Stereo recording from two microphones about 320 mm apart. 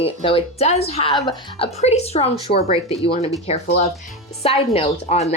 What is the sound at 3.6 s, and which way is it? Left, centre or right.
Speech, left.